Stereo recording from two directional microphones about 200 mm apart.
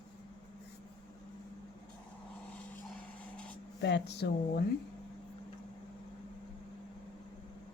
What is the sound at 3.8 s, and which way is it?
Speech, 60° left (ahead or behind).